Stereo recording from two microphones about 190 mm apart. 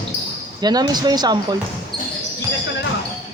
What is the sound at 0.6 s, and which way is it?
Speech, 20° right (ahead or behind).